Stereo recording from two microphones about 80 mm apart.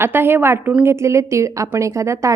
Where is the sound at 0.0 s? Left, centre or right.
Right.